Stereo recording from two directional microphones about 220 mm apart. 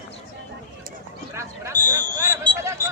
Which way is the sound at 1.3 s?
10° right (ahead or behind).